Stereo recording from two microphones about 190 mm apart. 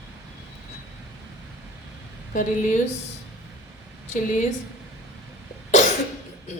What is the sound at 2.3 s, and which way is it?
Speech, 40° left (ahead or behind).